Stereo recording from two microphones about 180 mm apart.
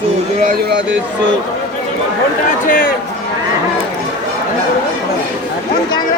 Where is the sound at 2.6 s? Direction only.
50° left (ahead or behind).